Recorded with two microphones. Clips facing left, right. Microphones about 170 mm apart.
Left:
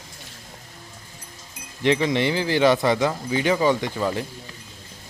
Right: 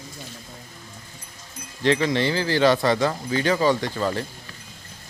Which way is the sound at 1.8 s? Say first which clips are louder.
Even; 20° left (ahead or behind).